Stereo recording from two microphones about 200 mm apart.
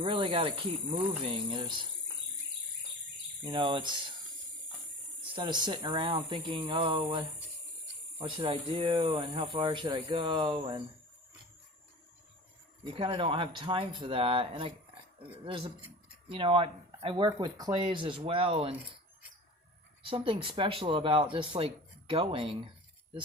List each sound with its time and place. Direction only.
0.0 s speech: 25° right (ahead or behind)
3.4 s speech: 25° right (ahead or behind)
5.3 s speech: 25° right (ahead or behind)
12.8 s speech: 30° right (ahead or behind)
16.3 s speech: 25° right (ahead or behind)
20.0 s speech: 25° right (ahead or behind)